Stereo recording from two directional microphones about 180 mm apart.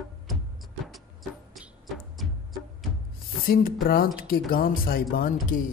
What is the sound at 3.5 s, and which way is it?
Speech, 55° left (ahead or behind).